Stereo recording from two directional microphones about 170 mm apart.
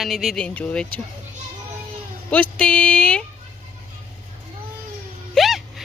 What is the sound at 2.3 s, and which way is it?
Speech, 10° left (ahead or behind).